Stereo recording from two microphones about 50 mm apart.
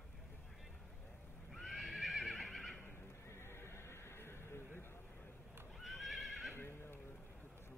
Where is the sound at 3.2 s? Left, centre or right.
Left.